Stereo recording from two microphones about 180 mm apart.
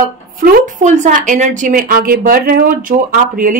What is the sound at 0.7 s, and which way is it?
A woman's voice, 45° right (ahead or behind).